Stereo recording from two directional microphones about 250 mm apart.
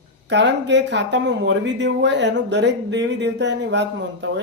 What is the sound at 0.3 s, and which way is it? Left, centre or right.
Speech, right.